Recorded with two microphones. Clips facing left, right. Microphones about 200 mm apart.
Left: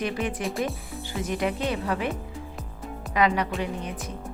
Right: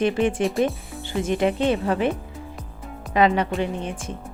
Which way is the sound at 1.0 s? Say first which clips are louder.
Right 6 dB; 25° right (ahead or behind).